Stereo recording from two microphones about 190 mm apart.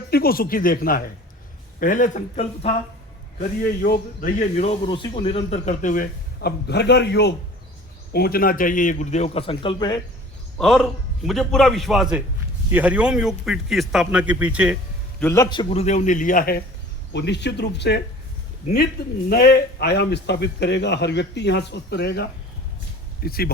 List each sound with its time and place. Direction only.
0.1 s a man's voice: 50° left (ahead or behind); by 2.7 s 35° left (ahead or behind)
3.6 s speech: 50° left (ahead or behind)
8.1 s a man's voice: 55° left (ahead or behind); by 10.0 s 20° left (ahead or behind)
10.6 s a man's voice: centre (ahead or behind)
15.2 s a man's voice: 15° left (ahead or behind)
15.4 s a man's voice: 30° left (ahead or behind); by 16.6 s 50° left (ahead or behind)
17.1 s a man's voice: 65° left (ahead or behind)
19.3 s a man's voice: 55° left (ahead or behind)